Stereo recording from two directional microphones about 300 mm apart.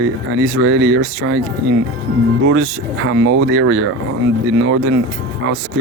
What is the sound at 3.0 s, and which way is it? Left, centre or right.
Speech, right.